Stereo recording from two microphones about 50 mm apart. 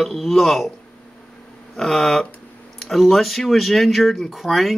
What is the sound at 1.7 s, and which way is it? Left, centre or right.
Speech, centre.